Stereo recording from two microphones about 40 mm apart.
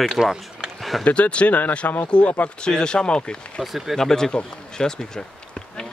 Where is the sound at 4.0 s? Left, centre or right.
Centre.